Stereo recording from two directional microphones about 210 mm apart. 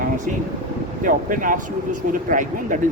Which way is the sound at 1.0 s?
40° right (ahead or behind).